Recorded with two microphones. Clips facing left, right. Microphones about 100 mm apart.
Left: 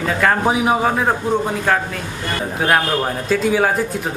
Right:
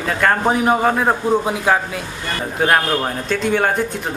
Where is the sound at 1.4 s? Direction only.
10° right (ahead or behind).